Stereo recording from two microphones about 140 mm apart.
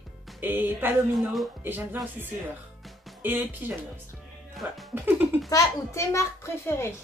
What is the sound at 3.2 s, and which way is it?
Speech, 15° right (ahead or behind).